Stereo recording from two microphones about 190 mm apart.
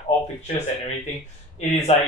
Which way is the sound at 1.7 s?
35° left (ahead or behind).